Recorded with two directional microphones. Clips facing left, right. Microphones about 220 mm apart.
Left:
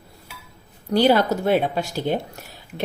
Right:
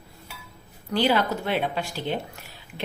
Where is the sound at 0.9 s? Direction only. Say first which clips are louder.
Left 6 dB; 40° left (ahead or behind).